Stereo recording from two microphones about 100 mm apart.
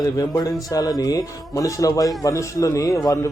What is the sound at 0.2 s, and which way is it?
A man's voice, 40° left (ahead or behind).